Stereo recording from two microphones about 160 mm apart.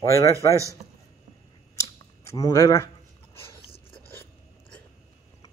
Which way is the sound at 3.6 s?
35° left (ahead or behind).